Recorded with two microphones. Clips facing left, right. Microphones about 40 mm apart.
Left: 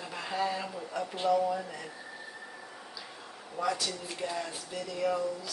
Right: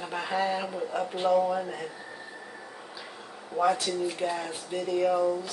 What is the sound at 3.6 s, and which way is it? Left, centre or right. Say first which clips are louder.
Speech: right 7 dB; right.